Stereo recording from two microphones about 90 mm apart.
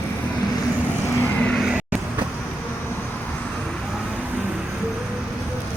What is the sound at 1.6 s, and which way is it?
Vehicle, 10° right (ahead or behind).